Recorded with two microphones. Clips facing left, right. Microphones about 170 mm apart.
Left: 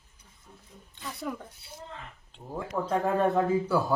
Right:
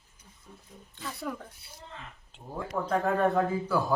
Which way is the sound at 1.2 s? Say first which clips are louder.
Left 1 dB; 5° left (ahead or behind).